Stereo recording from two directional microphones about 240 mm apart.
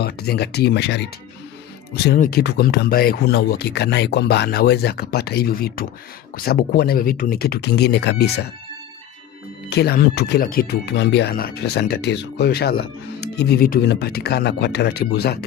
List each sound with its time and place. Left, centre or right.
0.0 s speech: left
2.1 s speech: left
9.6 s speech: left